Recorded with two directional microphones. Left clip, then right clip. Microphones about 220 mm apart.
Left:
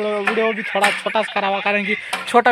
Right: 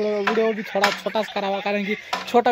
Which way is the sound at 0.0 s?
5° right (ahead or behind).